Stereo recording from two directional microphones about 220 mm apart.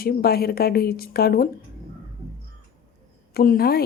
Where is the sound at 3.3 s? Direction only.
45° left (ahead or behind).